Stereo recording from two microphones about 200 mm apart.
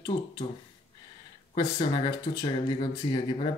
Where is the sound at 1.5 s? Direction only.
20° left (ahead or behind).